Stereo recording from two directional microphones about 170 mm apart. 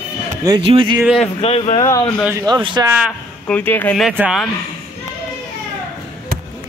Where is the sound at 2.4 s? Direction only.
25° right (ahead or behind).